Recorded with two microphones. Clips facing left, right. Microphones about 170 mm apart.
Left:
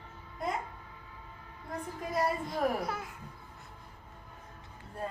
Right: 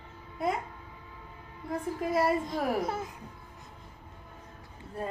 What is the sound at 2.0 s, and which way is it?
Speech, 5° right (ahead or behind).